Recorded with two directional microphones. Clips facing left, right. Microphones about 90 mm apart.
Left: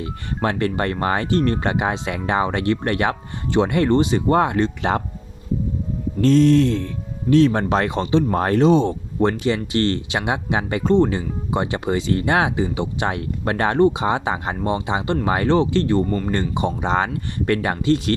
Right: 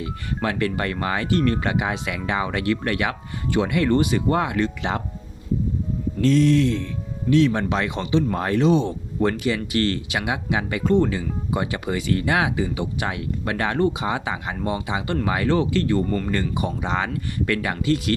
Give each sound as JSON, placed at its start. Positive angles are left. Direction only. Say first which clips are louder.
{"t": 0.4, "sound": "speech", "louder": "left 3 dB", "side_deg": 35}
{"t": 6.2, "sound": "speech", "louder": "left 3 dB", "side_deg": 40}
{"t": 16.0, "sound": "speech", "louder": "left 2 dB", "side_deg": 15}
{"t": 16.3, "sound": "speech", "louder": "left 3 dB", "side_deg": 30}